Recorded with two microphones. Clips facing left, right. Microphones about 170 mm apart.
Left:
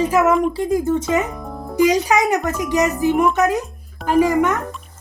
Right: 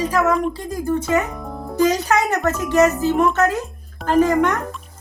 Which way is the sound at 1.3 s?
Centre (ahead or behind).